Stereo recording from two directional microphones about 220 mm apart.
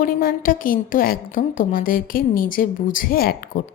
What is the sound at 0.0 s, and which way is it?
A woman's voice, 40° left (ahead or behind).